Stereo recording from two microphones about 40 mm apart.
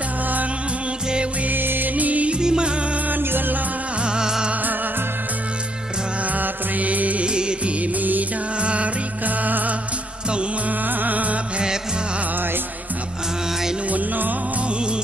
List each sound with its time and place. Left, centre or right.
1.5 s music: right
2.0 s music: right
2.3 s music: right
3.1 s music: right
4.0 s music: centre
6.2 s music: right
7.2 s music: right
7.8 s music: right
8.5 s music: right
9.2 s music: right
11.5 s music: centre
13.8 s music: right
14.7 s music: right